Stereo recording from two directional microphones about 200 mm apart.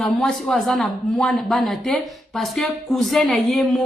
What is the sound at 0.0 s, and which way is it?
A man's voice, centre (ahead or behind).